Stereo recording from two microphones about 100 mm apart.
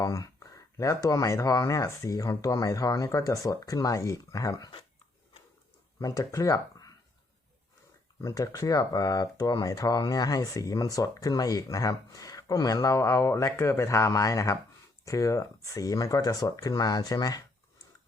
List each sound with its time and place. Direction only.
0.0 s speech: 35° left (ahead or behind)
6.0 s speech: 35° left (ahead or behind)
8.2 s speech: 35° left (ahead or behind)